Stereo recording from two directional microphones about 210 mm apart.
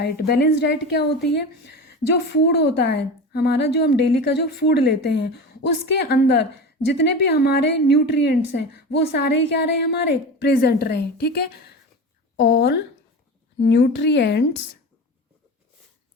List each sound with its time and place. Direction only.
0.0 s a woman's voice: 55° left (ahead or behind)